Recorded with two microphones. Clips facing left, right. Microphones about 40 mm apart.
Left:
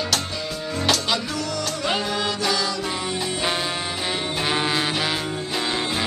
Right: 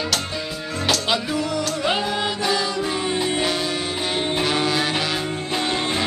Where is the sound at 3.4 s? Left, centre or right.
Left.